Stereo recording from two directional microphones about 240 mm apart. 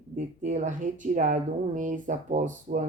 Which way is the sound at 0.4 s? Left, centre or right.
Right.